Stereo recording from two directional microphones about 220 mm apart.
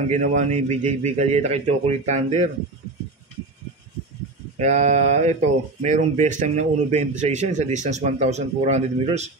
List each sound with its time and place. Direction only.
0.1 s speech: 30° right (ahead or behind)
4.6 s speech: 30° right (ahead or behind)